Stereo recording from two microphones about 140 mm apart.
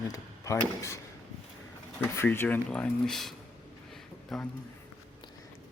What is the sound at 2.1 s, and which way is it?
Speech, 15° left (ahead or behind).